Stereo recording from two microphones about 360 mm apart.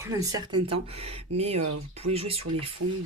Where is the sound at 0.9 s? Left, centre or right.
Centre.